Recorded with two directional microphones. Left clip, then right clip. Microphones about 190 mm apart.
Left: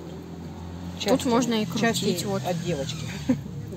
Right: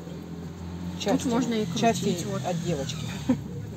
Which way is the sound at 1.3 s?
60° left (ahead or behind).